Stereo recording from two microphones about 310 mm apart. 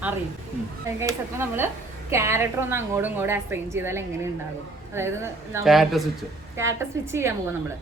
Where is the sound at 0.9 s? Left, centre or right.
Centre.